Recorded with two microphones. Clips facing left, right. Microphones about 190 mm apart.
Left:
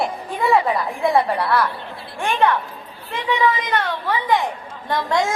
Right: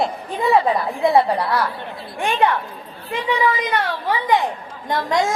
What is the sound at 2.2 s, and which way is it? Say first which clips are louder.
Speech: right 1 dB; 15° right (ahead or behind).